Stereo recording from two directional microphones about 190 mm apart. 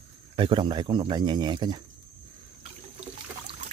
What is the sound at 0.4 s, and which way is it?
Speech, 25° right (ahead or behind).